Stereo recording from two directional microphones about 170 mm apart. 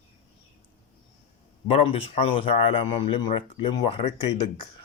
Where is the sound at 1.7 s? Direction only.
35° left (ahead or behind).